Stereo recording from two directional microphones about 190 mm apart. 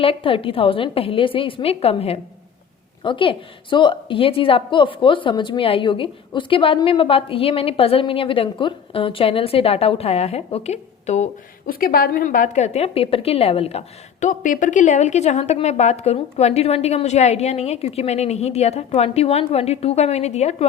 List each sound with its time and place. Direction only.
0.0 s a woman's voice: 30° left (ahead or behind)